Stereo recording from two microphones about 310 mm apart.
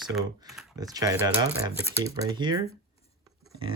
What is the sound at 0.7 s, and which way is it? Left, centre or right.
Speech, centre.